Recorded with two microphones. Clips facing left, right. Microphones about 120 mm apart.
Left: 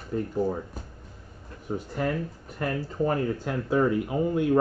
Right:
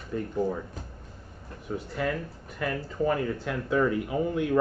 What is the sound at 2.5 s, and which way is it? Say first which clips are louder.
Speech: left 1 dB; 35° left (ahead or behind).